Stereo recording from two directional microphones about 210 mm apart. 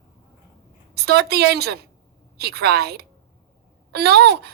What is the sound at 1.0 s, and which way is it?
A woman's voice, 50° right (ahead or behind).